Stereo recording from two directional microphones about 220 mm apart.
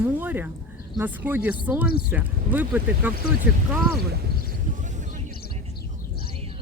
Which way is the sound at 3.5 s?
5° right (ahead or behind).